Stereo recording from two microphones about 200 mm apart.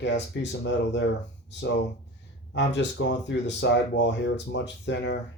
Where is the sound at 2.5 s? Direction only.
60° left (ahead or behind).